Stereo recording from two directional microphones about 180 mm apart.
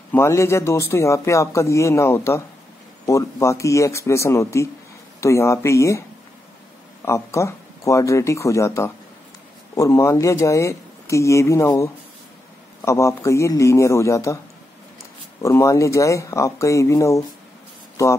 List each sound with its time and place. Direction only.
0.1 s speech: 15° left (ahead or behind)
7.1 s speech: 15° left (ahead or behind)
15.4 s speech: 15° left (ahead or behind)